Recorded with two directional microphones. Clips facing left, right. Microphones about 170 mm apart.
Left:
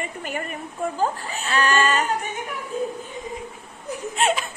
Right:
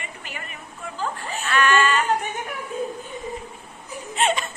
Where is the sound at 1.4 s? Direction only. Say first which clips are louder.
Right 1 dB; 35° left (ahead or behind).